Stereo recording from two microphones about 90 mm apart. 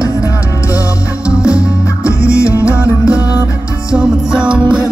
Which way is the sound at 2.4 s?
35° left (ahead or behind).